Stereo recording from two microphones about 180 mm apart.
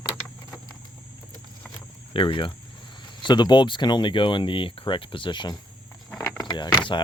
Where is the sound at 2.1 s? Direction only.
30° left (ahead or behind).